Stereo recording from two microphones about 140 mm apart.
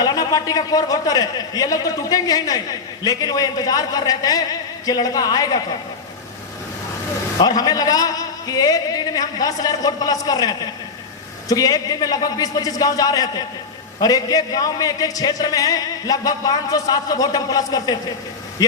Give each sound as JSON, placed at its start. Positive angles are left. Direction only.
{"t": 0.0, "sound": "a man's voice", "side_deg": 30}
{"t": 7.3, "sound": "a man's voice", "side_deg": 30}